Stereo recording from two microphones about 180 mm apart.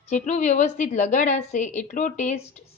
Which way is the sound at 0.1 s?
40° left (ahead or behind).